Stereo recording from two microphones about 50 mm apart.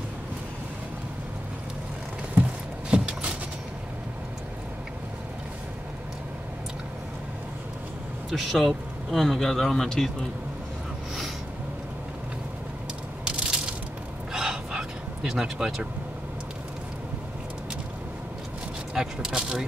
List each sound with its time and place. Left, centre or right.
2.4 s a sound: right
2.9 s vehicle: right
8.3 s speech: centre
13.2 s crushing: centre
14.3 s a sound: centre
18.9 s speech: centre